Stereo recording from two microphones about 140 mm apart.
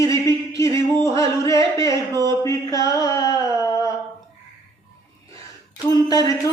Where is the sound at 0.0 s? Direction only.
25° left (ahead or behind).